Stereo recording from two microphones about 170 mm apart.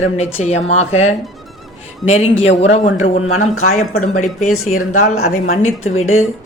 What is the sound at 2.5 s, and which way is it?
A woman's voice, 40° left (ahead or behind).